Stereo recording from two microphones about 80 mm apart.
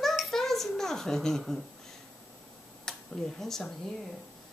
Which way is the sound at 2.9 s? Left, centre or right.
Centre.